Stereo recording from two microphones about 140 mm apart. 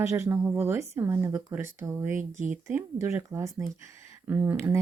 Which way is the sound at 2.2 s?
65° right (ahead or behind).